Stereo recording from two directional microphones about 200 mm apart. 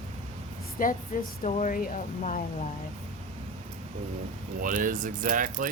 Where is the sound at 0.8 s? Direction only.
40° left (ahead or behind).